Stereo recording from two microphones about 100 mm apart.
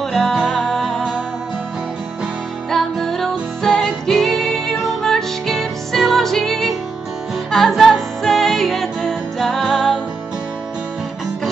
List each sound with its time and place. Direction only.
0.1 s music: centre (ahead or behind)
2.7 s music: centre (ahead or behind)